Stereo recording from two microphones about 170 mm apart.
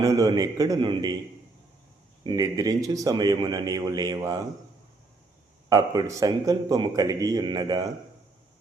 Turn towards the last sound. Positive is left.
turn(degrees=-25)  # may be behind; listen again after turning